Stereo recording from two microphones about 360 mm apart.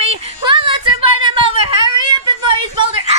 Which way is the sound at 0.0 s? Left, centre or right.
Centre.